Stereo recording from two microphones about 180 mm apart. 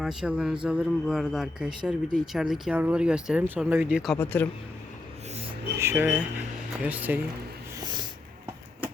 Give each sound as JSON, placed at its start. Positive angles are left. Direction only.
{"t": 0.0, "sound": "speech", "side_deg": -5}
{"t": 4.2, "sound": "speech", "side_deg": 10}
{"t": 5.8, "sound": "speech", "side_deg": -10}
{"t": 7.8, "sound": "snort", "side_deg": -25}